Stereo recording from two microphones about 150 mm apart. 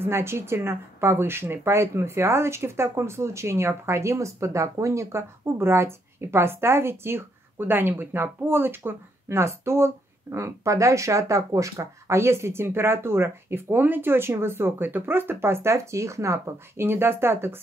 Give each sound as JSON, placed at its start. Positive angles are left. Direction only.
{"t": 0.0, "sound": "speech", "side_deg": -15}